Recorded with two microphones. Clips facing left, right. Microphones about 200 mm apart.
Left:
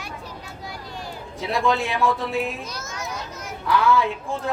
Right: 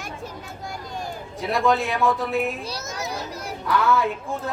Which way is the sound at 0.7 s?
45° right (ahead or behind).